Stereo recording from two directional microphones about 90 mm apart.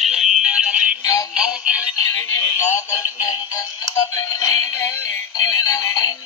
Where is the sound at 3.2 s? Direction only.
40° left (ahead or behind).